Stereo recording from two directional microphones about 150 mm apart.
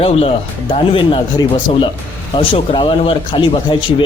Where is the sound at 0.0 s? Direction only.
40° left (ahead or behind).